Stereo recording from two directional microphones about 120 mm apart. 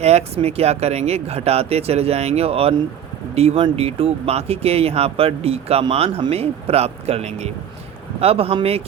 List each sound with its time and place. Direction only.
0.0 s speech: 60° right (ahead or behind)